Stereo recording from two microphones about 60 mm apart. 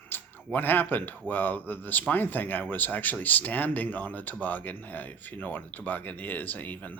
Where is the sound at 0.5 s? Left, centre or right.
Left.